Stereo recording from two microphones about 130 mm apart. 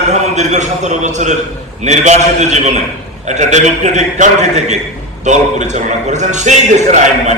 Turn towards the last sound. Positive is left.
turn(degrees=-65)  # may be behind; listen again after turning